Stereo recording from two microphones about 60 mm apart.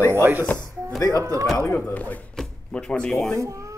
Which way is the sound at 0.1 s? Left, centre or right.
Right.